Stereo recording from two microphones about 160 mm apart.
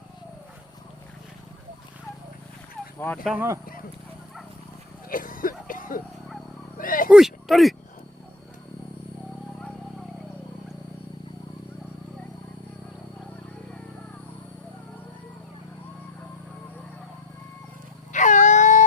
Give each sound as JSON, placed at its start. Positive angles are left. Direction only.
{"t": 3.2, "sound": "speech", "side_deg": -15}
{"t": 5.0, "sound": "a sound", "side_deg": 60}
{"t": 7.1, "sound": "speech", "side_deg": 0}
{"t": 18.1, "sound": "wail", "side_deg": 50}